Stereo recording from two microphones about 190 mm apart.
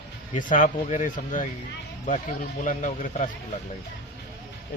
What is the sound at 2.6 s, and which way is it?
Speech, 40° left (ahead or behind).